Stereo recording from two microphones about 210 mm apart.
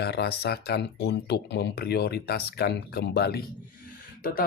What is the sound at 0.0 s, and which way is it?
Speech, 50° left (ahead or behind).